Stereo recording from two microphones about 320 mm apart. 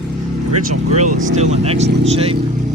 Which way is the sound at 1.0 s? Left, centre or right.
Right.